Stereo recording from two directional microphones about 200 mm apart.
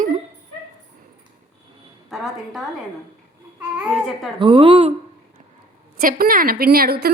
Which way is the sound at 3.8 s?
5° right (ahead or behind).